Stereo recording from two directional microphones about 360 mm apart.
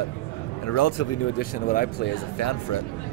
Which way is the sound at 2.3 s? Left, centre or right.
Left.